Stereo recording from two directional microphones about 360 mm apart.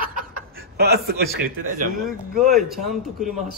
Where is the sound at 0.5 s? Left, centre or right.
Right.